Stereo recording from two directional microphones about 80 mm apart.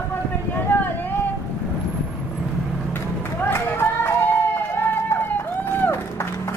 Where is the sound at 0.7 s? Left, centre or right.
Left.